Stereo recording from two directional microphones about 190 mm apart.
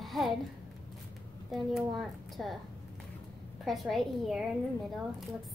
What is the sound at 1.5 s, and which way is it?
A woman's voice, centre (ahead or behind).